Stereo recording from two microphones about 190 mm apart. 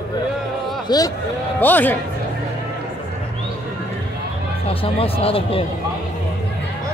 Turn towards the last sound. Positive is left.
turn(degrees=30)  # may be behind; listen again after turning